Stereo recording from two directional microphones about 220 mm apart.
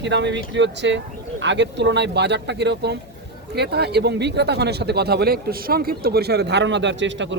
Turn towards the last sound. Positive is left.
turn(degrees=-55)  # may be behind; listen again after turning